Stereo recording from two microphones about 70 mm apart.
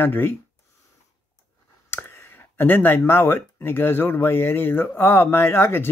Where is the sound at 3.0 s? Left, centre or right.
Left.